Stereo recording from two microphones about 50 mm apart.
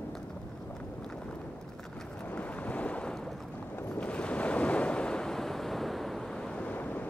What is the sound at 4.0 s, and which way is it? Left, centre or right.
Waves, left.